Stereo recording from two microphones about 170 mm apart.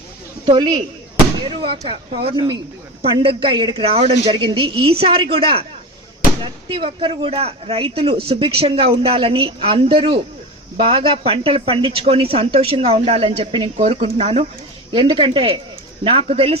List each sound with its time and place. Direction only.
1.4 s speech: 30° right (ahead or behind)